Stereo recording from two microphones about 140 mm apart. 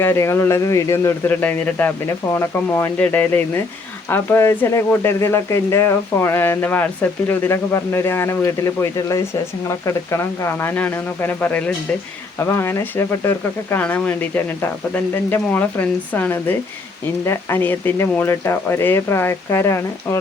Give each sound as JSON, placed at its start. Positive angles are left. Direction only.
{"t": 0.0, "sound": "speech", "side_deg": 20}